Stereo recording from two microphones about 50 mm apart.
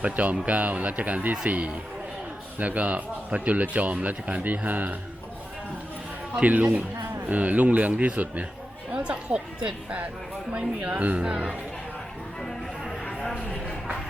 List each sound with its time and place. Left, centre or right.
0.0 s speech: right
6.4 s a woman's voice: right
13.3 s a sound: left